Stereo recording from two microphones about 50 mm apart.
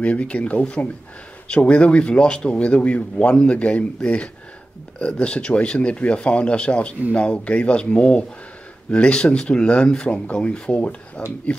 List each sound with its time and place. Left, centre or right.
0.0 s speech: left